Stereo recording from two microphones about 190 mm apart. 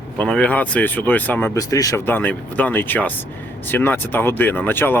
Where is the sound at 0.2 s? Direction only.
5° left (ahead or behind).